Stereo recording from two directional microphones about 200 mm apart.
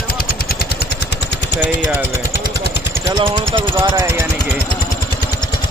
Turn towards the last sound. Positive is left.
turn(degrees=-20)  # may be behind; listen again after turning